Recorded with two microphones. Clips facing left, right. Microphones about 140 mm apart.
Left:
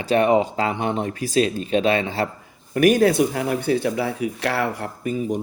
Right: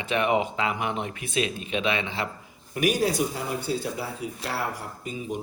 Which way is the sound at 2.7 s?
55° left (ahead or behind).